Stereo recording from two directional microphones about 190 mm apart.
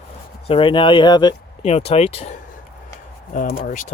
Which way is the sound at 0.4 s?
30° left (ahead or behind).